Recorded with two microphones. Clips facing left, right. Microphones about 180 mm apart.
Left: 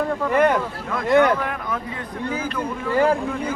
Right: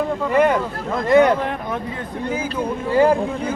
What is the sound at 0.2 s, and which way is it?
Speech, 5° right (ahead or behind).